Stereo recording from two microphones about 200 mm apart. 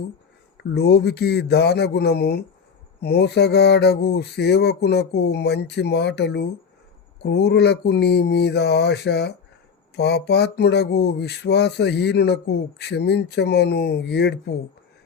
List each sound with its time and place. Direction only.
0.5 s speech: 55° left (ahead or behind)